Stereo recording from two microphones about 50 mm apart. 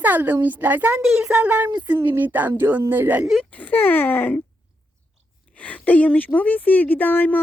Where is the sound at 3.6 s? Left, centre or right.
Left.